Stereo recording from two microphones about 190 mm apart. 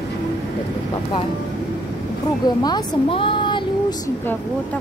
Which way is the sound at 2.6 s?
20° left (ahead or behind).